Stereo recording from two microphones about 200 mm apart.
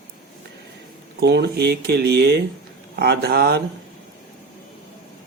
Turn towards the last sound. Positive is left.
turn(degrees=-50)  # may be behind; listen again after turning